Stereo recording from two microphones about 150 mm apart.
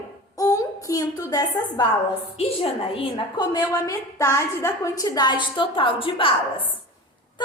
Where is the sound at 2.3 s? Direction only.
40° left (ahead or behind).